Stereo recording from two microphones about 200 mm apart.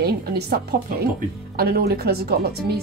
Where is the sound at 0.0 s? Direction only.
55° right (ahead or behind).